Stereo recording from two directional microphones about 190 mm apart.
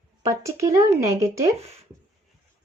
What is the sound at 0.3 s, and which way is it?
Speech, 15° right (ahead or behind).